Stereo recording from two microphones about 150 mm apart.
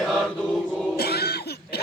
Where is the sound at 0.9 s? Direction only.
90° left.